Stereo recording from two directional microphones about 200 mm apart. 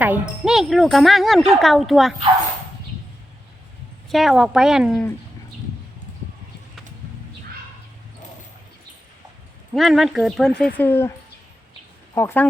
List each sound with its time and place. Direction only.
0.0 s speech: 5° right (ahead or behind)
4.1 s speech: centre (ahead or behind)
9.7 s speech: centre (ahead or behind)
12.1 s speech: 10° left (ahead or behind)